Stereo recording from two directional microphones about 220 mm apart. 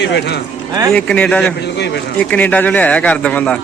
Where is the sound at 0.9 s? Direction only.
5° left (ahead or behind).